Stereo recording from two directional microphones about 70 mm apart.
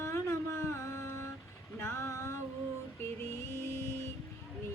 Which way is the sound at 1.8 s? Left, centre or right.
Left.